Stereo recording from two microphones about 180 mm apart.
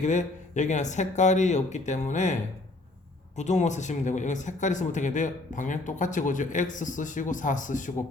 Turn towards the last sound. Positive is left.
turn(degrees=45)  # may be behind; listen again after turning